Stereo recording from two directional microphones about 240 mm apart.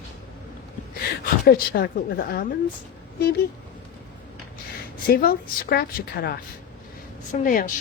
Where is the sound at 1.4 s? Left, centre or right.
Left.